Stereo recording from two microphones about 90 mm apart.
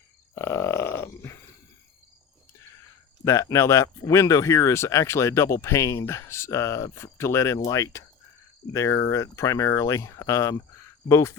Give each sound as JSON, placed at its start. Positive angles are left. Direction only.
{"t": 0.3, "sound": "grunt", "side_deg": 30}
{"t": 3.2, "sound": "speech", "side_deg": 35}